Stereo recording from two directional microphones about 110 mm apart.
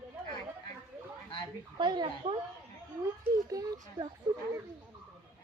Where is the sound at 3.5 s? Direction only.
35° right (ahead or behind).